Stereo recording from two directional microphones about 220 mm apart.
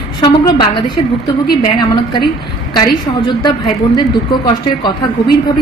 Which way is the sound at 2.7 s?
20° left (ahead or behind).